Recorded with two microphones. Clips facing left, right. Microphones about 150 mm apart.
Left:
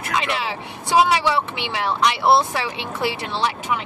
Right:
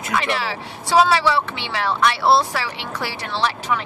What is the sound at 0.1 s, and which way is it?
Speech, 20° left (ahead or behind).